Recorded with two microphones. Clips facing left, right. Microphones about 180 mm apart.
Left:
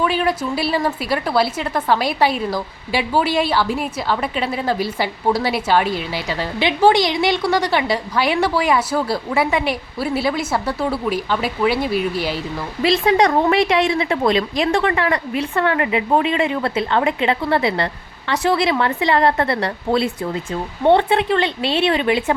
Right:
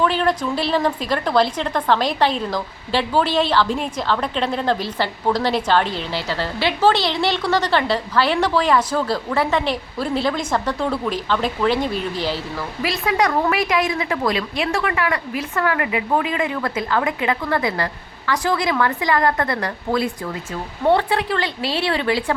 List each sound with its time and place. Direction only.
0.0 s a woman's voice: 10° left (ahead or behind)
12.8 s a woman's voice: 30° left (ahead or behind)